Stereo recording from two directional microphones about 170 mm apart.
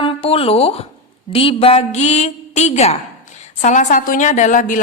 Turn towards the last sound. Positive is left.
turn(degrees=50)  # may be behind; listen again after turning